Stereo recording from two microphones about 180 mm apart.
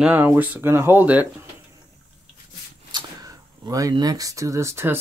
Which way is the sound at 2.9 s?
20° right (ahead or behind).